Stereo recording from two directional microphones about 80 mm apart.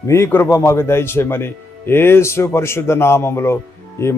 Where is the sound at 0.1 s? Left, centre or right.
Left.